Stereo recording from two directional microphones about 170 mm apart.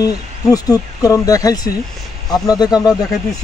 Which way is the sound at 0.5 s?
20° left (ahead or behind).